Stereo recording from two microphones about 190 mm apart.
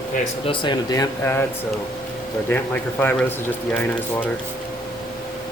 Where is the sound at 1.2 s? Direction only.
10° left (ahead or behind).